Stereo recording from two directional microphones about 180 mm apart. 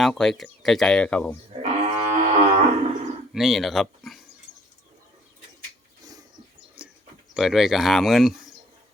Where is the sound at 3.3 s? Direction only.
Centre (ahead or behind).